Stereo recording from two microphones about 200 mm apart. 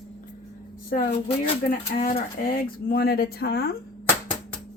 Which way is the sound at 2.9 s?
50° left (ahead or behind).